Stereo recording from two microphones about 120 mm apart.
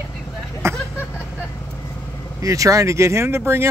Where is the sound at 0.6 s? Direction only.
20° right (ahead or behind).